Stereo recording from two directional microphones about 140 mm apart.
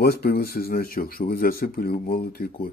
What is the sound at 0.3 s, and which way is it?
Speech, 90° left.